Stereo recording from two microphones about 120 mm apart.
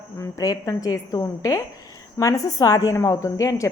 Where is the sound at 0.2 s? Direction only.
30° left (ahead or behind).